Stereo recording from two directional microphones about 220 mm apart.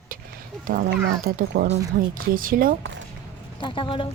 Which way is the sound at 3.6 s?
20° left (ahead or behind).